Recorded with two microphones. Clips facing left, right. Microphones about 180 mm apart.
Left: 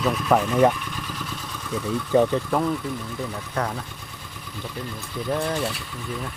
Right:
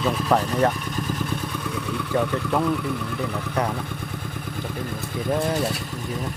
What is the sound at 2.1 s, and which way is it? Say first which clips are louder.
Speech: left 5 dB; 15° left (ahead or behind).